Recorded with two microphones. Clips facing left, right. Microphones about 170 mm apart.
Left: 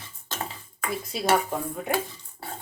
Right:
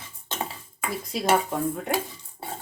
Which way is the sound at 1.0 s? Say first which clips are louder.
Right 1 dB; centre (ahead or behind).